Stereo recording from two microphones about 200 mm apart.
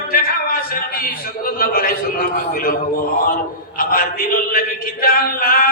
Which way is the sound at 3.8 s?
45° left (ahead or behind).